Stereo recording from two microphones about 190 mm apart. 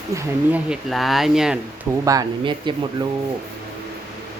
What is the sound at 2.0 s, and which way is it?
Speech, 20° right (ahead or behind).